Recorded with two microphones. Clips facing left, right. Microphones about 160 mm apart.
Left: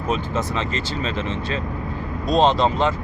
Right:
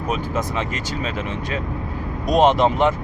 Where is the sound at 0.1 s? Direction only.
15° right (ahead or behind).